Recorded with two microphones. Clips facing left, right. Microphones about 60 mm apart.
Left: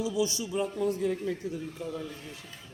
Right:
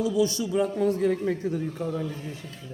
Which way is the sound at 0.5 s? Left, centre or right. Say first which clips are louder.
Right 5 dB; right.